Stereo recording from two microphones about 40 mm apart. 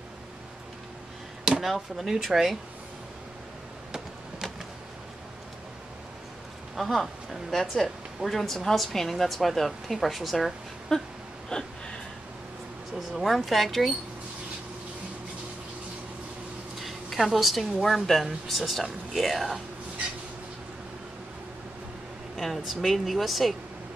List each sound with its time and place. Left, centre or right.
1.6 s a woman's voice: centre
6.8 s a woman's voice: centre
10.9 s a sound: centre
11.5 s gasp: left
12.9 s a woman's voice: centre
16.7 s a woman's voice: centre
22.4 s a woman's voice: centre